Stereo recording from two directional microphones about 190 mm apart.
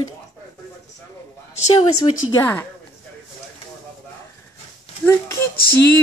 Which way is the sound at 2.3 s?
10° left (ahead or behind).